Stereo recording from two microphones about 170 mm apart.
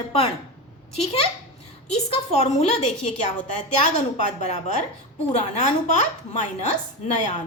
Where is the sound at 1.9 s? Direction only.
40° left (ahead or behind).